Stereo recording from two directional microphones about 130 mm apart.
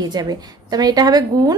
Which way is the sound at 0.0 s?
30° right (ahead or behind).